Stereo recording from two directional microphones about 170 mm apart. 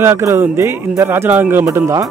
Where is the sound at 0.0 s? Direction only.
15° right (ahead or behind).